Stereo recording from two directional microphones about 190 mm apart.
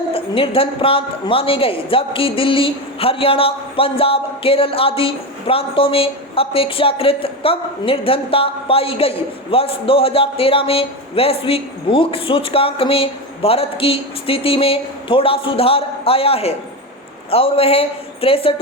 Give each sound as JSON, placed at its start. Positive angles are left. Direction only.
{"t": 0.1, "sound": "a woman's voice", "side_deg": 30}